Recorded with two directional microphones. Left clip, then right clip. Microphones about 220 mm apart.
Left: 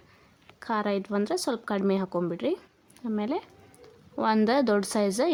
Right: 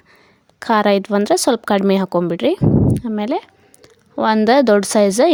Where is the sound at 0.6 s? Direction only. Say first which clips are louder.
Right 14 dB; 40° right (ahead or behind).